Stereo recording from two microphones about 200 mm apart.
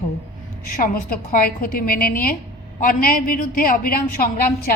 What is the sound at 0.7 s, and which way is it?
A woman's voice, 45° left (ahead or behind).